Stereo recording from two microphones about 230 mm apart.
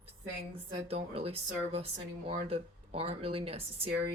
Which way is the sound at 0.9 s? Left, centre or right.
Right.